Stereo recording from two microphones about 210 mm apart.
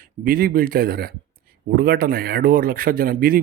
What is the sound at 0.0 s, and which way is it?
Speech, 45° right (ahead or behind).